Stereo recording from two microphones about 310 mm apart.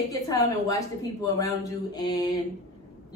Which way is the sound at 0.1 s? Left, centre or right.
Centre.